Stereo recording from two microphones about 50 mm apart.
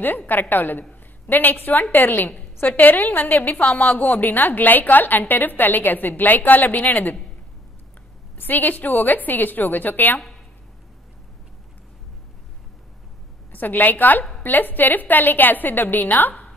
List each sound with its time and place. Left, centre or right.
0.3 s a woman's voice: left
8.4 s a woman's voice: left
13.5 s a woman's voice: left